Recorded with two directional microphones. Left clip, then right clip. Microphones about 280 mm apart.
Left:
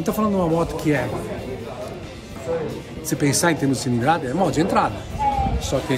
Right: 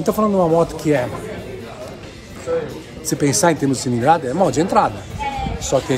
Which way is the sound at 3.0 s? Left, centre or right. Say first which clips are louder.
Right 4 dB; centre.